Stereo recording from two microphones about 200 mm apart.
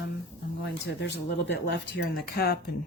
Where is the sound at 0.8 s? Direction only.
60° left (ahead or behind).